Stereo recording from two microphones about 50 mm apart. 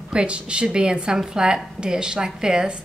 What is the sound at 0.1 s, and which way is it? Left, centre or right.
A woman's voice, centre.